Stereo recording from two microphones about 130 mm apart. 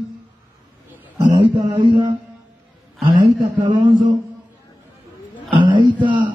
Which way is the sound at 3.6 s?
35° right (ahead or behind).